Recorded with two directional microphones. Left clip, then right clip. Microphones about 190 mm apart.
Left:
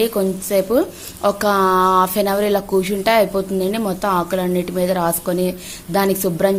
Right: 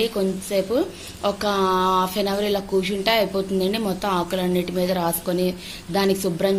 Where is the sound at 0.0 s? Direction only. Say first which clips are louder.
Left 4 dB; 20° left (ahead or behind).